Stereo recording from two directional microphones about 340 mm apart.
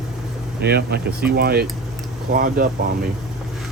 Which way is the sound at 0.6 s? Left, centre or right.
Right.